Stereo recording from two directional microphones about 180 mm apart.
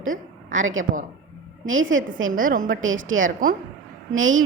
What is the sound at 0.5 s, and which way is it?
A woman's voice, 90° right.